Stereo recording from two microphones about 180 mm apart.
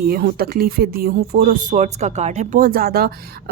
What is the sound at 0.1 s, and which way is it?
Speech, 60° right (ahead or behind).